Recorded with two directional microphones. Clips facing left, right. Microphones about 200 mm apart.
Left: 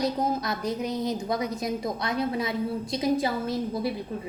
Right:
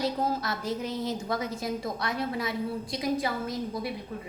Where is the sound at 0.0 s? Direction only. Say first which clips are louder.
Left 2 dB; 20° left (ahead or behind).